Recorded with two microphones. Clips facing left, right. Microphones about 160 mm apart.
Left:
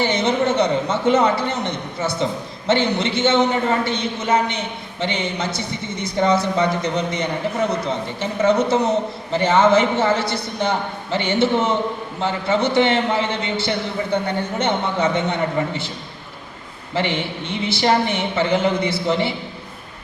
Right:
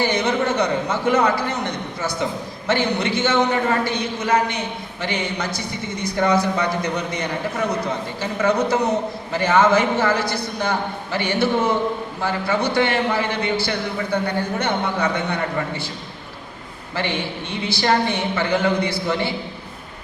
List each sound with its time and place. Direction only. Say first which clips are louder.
0.0 s a man's voice: left 1 dB; 25° left (ahead or behind)
16.9 s a man's voice: left 2 dB; 20° left (ahead or behind)